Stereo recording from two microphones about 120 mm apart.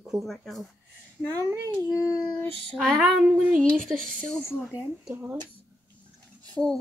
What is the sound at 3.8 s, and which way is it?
Speech, 15° right (ahead or behind).